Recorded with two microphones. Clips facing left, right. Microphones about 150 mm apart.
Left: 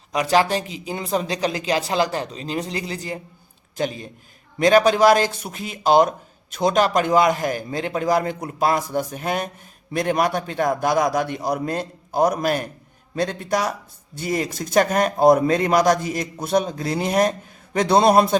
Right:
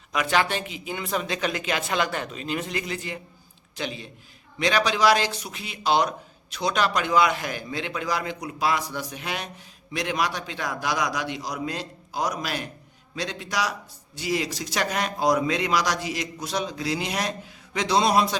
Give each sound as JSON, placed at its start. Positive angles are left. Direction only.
{"t": 0.1, "sound": "a man's voice", "side_deg": 35}